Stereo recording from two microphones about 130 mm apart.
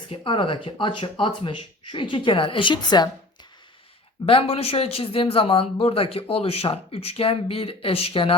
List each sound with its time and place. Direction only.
0.1 s speech: 40° left (ahead or behind)
4.3 s speech: 45° left (ahead or behind)